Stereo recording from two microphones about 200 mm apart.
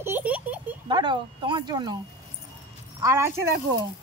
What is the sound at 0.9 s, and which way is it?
Speech, 25° right (ahead or behind).